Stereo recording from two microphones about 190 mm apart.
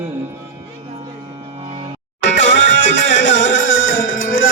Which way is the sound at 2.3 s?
70° left (ahead or behind).